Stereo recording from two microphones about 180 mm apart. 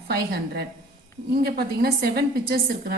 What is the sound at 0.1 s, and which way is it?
A woman's voice, 60° right (ahead or behind).